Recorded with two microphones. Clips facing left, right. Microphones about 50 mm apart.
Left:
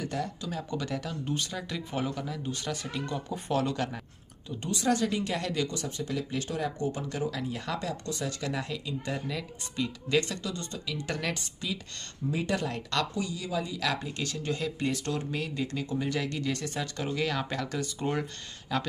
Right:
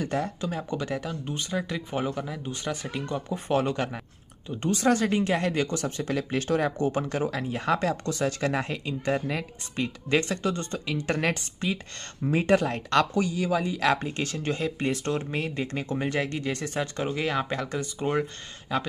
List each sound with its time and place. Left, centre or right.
0.0 s speech: right
4.5 s speech: right
13.1 s speech: right; by 18.9 s centre